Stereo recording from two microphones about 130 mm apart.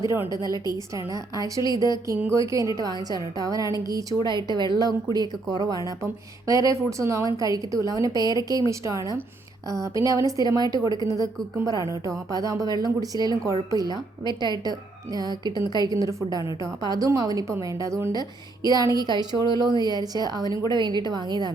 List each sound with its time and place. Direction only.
0.0 s a woman's voice: 20° right (ahead or behind)